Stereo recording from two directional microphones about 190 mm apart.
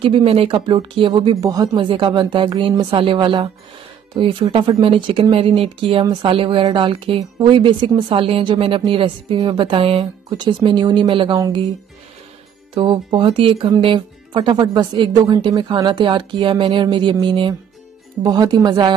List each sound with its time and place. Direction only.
0.0 s speech: 30° right (ahead or behind)
12.7 s speech: 25° right (ahead or behind)